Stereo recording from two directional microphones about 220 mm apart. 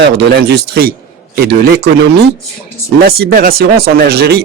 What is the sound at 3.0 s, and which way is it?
Speech, 45° right (ahead or behind).